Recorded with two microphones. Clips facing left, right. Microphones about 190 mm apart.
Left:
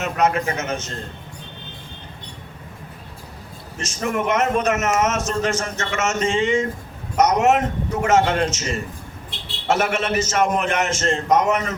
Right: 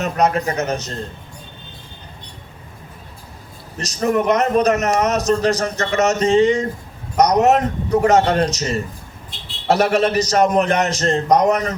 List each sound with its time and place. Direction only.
0.0 s a man's voice: 35° right (ahead or behind)
3.8 s a man's voice: 35° right (ahead or behind)